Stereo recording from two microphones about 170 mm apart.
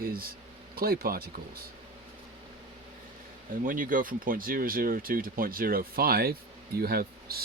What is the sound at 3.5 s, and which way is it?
Speech, 55° right (ahead or behind).